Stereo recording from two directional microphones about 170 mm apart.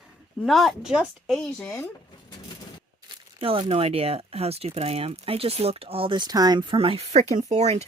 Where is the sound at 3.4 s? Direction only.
30° right (ahead or behind).